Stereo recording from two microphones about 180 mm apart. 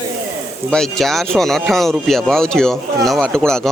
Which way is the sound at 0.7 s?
Centre (ahead or behind).